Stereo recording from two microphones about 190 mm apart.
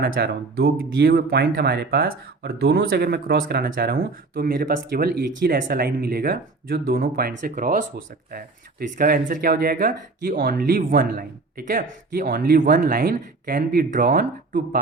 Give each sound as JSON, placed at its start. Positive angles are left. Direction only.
{"t": 0.0, "sound": "speech", "side_deg": -55}
{"t": 9.0, "sound": "speech", "side_deg": -45}